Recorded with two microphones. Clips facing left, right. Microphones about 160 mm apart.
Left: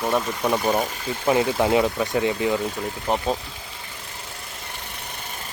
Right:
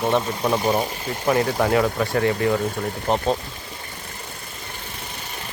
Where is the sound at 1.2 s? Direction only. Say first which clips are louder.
Even; 15° left (ahead or behind).